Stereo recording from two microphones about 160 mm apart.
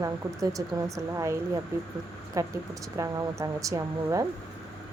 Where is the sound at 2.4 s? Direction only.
20° right (ahead or behind).